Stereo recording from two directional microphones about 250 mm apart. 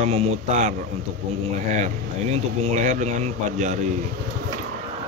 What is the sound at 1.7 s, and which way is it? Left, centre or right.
Mantra, right.